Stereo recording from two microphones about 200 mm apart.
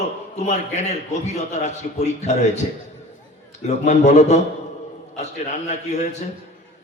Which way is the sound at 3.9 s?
35° left (ahead or behind).